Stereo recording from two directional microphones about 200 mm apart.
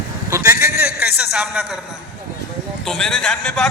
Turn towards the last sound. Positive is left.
turn(degrees=5)  # may be behind; listen again after turning